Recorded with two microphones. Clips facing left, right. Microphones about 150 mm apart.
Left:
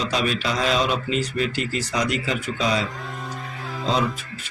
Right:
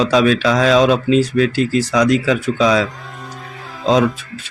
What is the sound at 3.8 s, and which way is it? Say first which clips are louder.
Speech: right 9 dB; 90° right.